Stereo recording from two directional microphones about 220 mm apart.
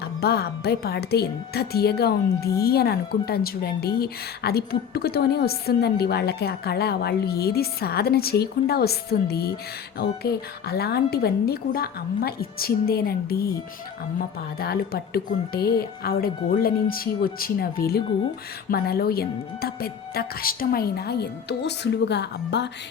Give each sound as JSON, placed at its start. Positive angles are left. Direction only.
{"t": 0.0, "sound": "speech", "side_deg": 45}